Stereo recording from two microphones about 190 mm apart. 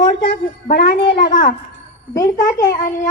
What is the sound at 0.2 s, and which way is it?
A woman's voice, 55° left (ahead or behind).